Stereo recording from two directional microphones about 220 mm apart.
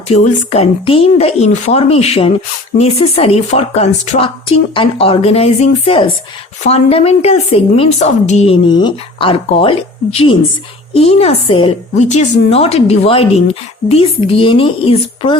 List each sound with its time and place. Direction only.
0.1 s a woman's voice: 30° left (ahead or behind)